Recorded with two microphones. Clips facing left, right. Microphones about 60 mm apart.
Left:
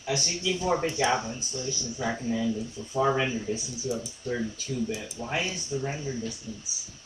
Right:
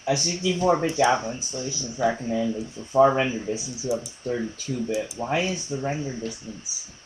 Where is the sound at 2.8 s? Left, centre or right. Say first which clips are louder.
Right 8 dB; right.